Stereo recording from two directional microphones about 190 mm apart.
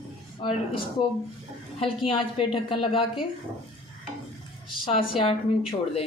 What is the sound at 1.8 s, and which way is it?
A woman's voice, 30° left (ahead or behind).